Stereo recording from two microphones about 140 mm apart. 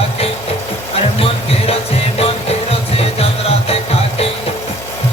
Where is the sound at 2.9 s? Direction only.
45° left (ahead or behind).